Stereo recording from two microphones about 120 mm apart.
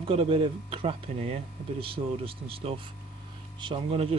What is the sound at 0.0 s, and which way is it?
Speech, 50° right (ahead or behind).